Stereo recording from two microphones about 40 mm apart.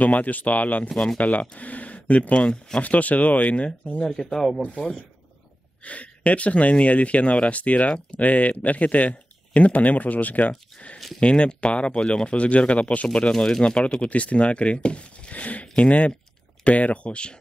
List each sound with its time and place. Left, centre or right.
0.0 s speech: left
4.0 s speech: centre
4.6 s speech: left
5.9 s speech: left
11.1 s speech: left
13.3 s speech: centre
14.0 s speech: left